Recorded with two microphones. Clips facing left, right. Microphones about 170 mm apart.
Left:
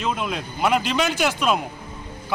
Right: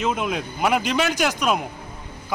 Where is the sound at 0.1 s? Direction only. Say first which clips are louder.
Right 2 dB; 5° right (ahead or behind).